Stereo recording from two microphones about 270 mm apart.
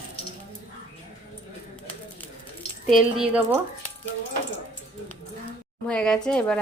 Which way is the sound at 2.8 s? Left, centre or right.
Centre.